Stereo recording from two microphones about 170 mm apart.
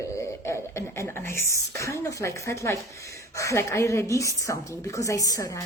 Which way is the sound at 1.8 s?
20° left (ahead or behind).